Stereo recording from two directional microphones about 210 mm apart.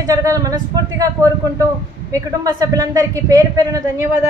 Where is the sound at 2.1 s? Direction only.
15° right (ahead or behind).